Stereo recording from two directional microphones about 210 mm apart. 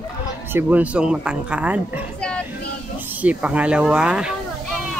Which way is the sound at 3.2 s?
5° right (ahead or behind).